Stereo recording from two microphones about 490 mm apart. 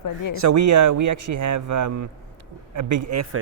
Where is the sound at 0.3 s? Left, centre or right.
Right.